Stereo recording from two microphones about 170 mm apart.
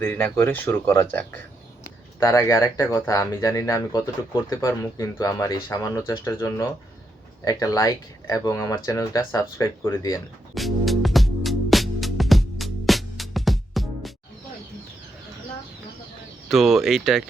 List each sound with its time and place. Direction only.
0.0 s speech: 10° left (ahead or behind)
7.4 s speech: 20° left (ahead or behind)
10.5 s music: centre (ahead or behind)
16.5 s speech: centre (ahead or behind)